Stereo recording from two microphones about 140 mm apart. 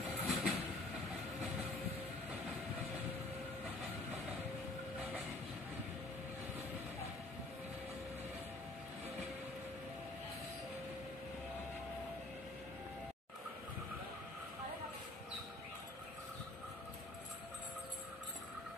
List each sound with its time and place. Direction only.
0.0 s vehicle: 5° right (ahead or behind)